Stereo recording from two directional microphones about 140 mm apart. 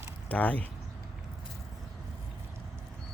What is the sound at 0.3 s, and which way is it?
Speech, 10° left (ahead or behind).